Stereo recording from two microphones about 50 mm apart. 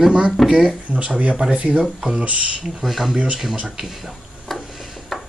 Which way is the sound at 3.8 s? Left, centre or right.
Centre.